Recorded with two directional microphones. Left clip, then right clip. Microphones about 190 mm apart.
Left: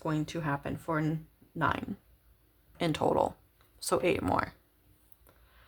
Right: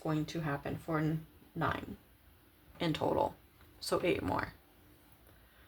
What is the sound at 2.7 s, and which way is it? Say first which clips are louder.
Speech: left 5 dB; 35° left (ahead or behind).